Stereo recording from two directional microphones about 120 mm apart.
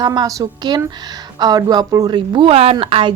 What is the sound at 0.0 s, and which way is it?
A woman's voice, 35° right (ahead or behind).